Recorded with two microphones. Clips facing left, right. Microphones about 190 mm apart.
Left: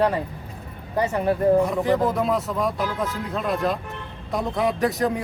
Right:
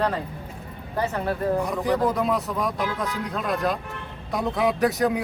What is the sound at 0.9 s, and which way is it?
Speech, 15° left (ahead or behind).